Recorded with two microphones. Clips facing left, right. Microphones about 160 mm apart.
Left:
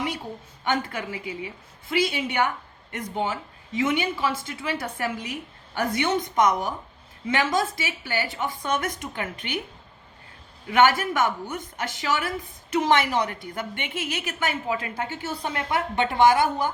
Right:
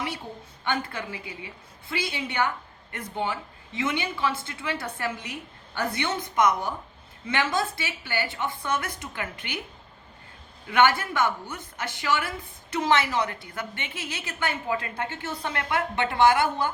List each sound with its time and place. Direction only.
0.6 s a woman's voice: 15° left (ahead or behind)
3.8 s a woman's voice: 10° left (ahead or behind)
10.7 s a woman's voice: 15° left (ahead or behind)